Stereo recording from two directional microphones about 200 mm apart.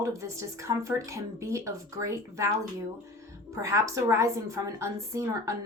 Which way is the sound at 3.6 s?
15° right (ahead or behind).